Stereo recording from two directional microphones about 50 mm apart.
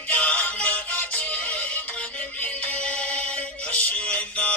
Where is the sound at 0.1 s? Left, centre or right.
Left.